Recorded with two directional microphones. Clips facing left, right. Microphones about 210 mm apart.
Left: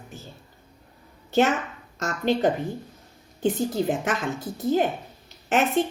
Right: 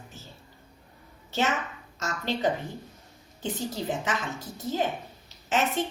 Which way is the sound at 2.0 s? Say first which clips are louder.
Left 7 dB; 55° left (ahead or behind).